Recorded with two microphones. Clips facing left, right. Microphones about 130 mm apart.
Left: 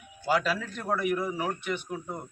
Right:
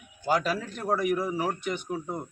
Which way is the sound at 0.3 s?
40° right (ahead or behind).